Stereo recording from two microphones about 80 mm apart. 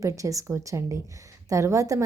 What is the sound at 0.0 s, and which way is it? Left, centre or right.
Speech, right.